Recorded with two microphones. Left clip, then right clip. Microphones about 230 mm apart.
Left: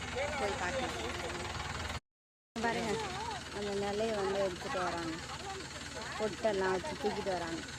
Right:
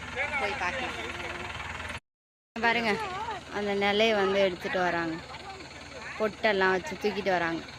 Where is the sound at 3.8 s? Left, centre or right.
Centre.